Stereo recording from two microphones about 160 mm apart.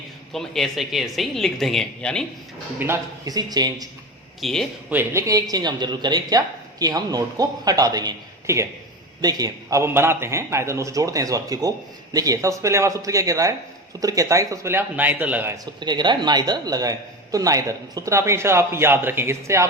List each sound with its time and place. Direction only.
0.3 s speech: centre (ahead or behind)
2.7 s a man's voice: 15° right (ahead or behind)
4.4 s speech: centre (ahead or behind)
4.9 s a man's voice: 15° right (ahead or behind)
15.8 s a man's voice: 25° right (ahead or behind)